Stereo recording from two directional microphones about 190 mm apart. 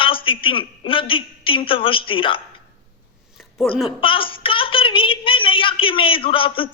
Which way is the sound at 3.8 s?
25° left (ahead or behind).